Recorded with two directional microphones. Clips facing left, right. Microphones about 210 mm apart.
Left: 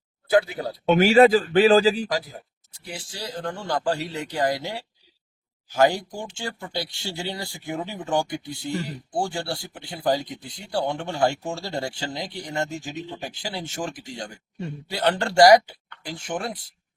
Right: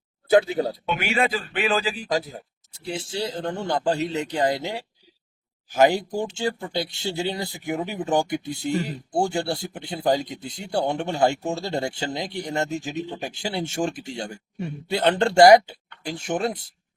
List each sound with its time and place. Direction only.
0.3 s speech: 25° right (ahead or behind)
0.9 s speech: 35° left (ahead or behind)
2.0 s speech: 25° right (ahead or behind)